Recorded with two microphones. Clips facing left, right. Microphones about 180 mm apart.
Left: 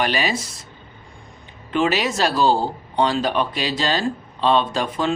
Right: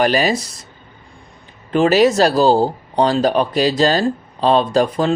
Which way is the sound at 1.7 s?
40° right (ahead or behind).